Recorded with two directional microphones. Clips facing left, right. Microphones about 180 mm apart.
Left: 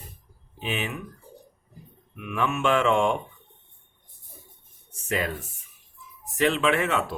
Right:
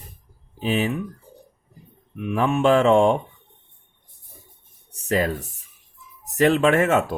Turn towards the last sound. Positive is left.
turn(degrees=-45)  # may be behind; listen again after turning